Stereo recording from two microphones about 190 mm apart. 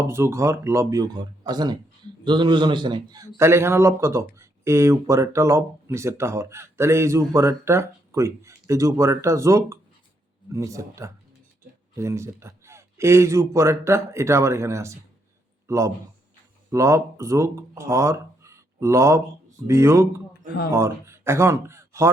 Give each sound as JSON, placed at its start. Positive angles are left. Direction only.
{"t": 0.1, "sound": "a man's voice", "side_deg": -15}